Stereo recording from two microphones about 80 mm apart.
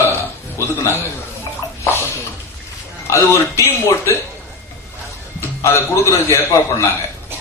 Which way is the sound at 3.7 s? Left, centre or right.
Left.